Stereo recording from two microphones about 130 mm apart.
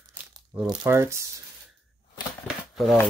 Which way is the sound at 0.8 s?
20° right (ahead or behind).